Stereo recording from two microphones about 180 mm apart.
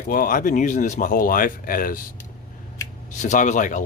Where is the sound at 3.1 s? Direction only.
45° left (ahead or behind).